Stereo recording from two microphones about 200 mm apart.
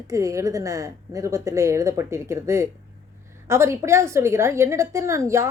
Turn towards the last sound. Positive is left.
turn(degrees=-15)  # may be behind; listen again after turning